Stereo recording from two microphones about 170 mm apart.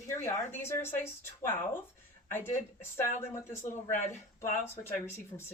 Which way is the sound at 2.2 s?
15° left (ahead or behind).